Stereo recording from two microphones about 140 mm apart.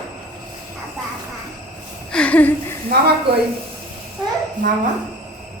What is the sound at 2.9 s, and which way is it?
Speech, 90° right.